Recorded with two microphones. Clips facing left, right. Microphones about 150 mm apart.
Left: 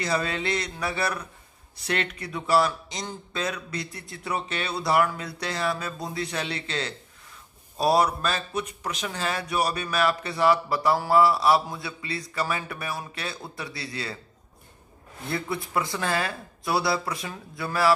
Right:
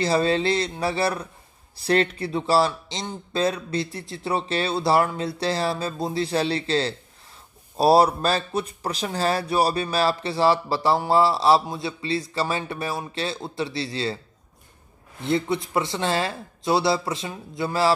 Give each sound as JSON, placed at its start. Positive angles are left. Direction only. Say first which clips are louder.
{"t": 0.0, "sound": "a man's voice", "louder": "right 6 dB", "side_deg": -30}
{"t": 15.2, "sound": "a man's voice", "louder": "right 7 dB", "side_deg": -25}